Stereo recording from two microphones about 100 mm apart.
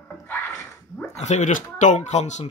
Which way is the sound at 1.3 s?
90° left.